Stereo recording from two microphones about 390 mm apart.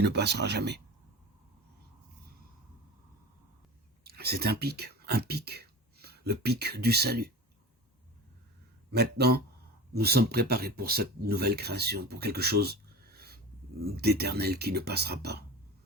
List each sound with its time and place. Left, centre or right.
0.0 s speech: right
4.0 s speech: right
8.9 s speech: right